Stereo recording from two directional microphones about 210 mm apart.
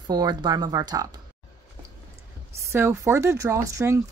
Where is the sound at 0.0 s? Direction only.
20° right (ahead or behind).